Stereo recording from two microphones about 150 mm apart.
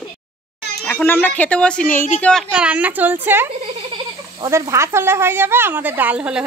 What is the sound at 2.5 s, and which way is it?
A woman's voice, 10° right (ahead or behind).